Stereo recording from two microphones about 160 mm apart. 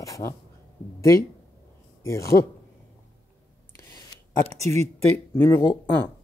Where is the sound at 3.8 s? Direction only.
20° left (ahead or behind).